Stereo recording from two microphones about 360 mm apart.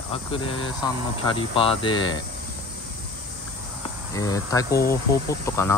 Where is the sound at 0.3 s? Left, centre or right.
Centre.